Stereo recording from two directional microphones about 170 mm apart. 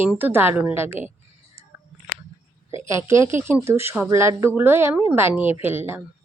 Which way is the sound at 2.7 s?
15° right (ahead or behind).